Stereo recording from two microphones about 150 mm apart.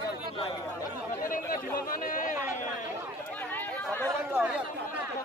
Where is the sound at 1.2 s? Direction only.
70° left (ahead or behind).